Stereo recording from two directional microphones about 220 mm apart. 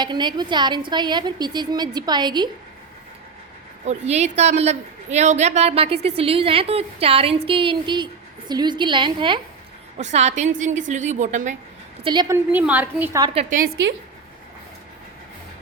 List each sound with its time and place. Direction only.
0.0 s a woman's voice: 20° right (ahead or behind)
3.8 s a woman's voice: 30° right (ahead or behind)
12.0 s a woman's voice: 20° right (ahead or behind)
13.3 s a woman's voice: 35° right (ahead or behind)